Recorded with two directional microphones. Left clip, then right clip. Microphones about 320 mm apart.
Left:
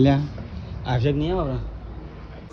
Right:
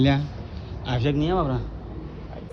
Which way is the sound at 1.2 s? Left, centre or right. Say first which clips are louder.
Right 1 dB; centre.